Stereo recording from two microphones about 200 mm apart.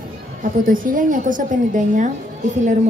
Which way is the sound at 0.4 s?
40° right (ahead or behind).